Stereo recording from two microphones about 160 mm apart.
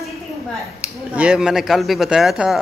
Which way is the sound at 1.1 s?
5° right (ahead or behind).